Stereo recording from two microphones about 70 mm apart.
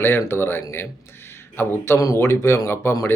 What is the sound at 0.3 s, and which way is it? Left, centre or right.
A man's voice, left.